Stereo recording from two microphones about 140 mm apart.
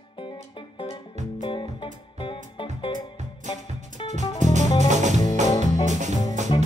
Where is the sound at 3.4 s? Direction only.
55° right (ahead or behind).